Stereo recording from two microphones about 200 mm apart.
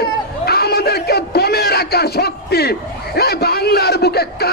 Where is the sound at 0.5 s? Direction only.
50° left (ahead or behind).